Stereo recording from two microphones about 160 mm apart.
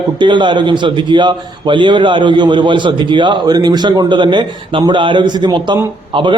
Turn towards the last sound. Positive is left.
turn(degrees=-30)  # may be behind; listen again after turning